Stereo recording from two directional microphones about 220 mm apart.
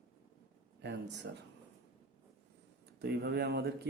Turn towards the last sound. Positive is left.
turn(degrees=-50)  # may be behind; listen again after turning